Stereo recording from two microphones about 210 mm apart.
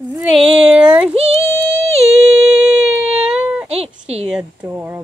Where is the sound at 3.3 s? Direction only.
5° right (ahead or behind).